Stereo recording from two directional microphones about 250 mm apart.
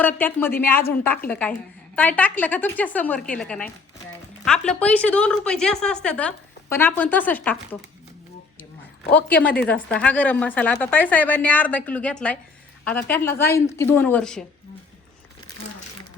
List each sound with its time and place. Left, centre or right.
0.0 s a woman's voice: centre
9.3 s a woman's voice: centre
13.5 s speech: left
13.7 s a woman's voice: centre